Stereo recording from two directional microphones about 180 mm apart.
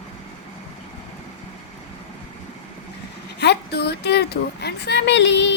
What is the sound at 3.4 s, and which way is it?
Speech, 65° left (ahead or behind).